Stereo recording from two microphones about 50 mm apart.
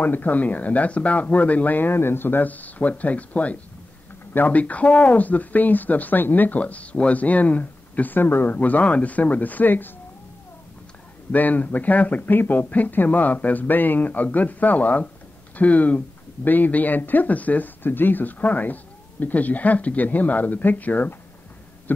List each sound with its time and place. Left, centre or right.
0.0 s speech: left
6.6 s speech: left
11.3 s speech: left